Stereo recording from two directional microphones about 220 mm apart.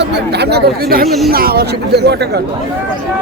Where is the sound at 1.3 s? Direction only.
45° right (ahead or behind).